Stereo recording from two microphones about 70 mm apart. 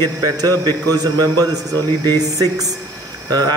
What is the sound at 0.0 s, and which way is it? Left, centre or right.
Speech, right.